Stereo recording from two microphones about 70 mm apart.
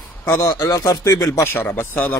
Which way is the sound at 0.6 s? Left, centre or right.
Left.